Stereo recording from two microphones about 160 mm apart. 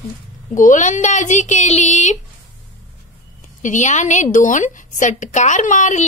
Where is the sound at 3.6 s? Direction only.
50° left (ahead or behind).